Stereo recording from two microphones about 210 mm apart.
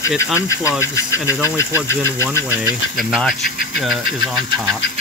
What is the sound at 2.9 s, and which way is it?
Speech, centre (ahead or behind).